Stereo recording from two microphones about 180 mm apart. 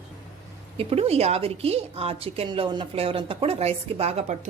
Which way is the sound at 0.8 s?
35° right (ahead or behind).